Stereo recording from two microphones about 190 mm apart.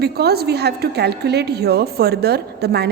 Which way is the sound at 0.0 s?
55° right (ahead or behind).